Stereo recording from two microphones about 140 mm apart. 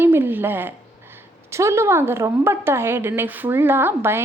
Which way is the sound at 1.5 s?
20° right (ahead or behind).